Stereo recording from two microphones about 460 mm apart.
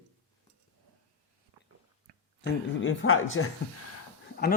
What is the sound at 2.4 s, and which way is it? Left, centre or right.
Speech, left.